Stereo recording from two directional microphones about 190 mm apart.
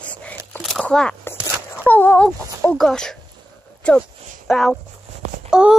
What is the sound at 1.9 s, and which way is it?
Speech, 10° left (ahead or behind).